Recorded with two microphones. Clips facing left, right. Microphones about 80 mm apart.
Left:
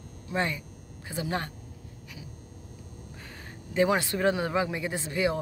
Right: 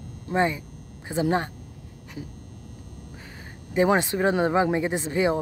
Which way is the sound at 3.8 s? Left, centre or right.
Right.